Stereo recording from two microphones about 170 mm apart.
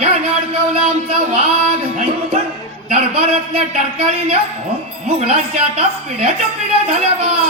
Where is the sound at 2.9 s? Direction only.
35° right (ahead or behind).